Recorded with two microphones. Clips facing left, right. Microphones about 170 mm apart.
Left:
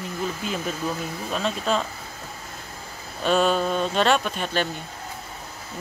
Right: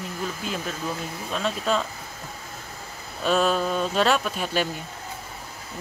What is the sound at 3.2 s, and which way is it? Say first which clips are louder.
Speech: left 1 dB; centre (ahead or behind).